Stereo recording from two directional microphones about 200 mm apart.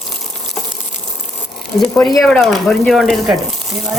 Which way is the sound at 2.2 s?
5° left (ahead or behind).